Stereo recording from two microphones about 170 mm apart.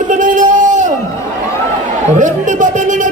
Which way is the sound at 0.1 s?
50° right (ahead or behind).